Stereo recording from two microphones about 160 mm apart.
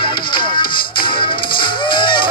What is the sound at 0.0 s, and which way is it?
Music, 30° left (ahead or behind).